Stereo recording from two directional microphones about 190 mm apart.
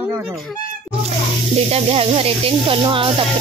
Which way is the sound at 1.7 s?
30° right (ahead or behind).